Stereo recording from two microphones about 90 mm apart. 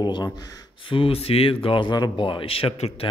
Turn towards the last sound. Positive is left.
turn(degrees=90)